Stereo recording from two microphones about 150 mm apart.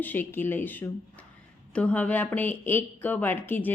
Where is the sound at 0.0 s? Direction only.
10° left (ahead or behind).